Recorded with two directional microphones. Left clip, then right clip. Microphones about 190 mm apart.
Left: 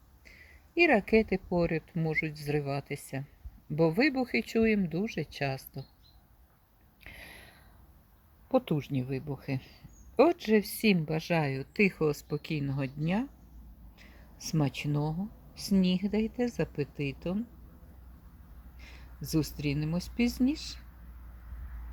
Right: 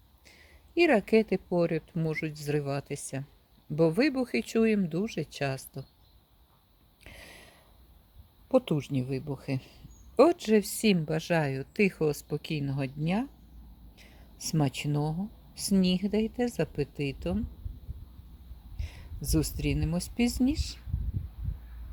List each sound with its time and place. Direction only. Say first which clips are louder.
0.3 s a woman's voice: left 2 dB; 15° right (ahead or behind)
7.0 s a sound: left 1 dB; 10° right (ahead or behind)
8.4 s a woman's voice: right 3 dB; 15° right (ahead or behind)
13.9 s a sound: even; 15° right (ahead or behind)
15.5 s a woman's voice: right 2 dB; 15° right (ahead or behind)
18.8 s a woman's voice: right 2 dB; 15° right (ahead or behind)